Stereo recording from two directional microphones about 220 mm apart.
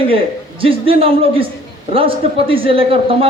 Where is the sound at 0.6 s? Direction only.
25° right (ahead or behind).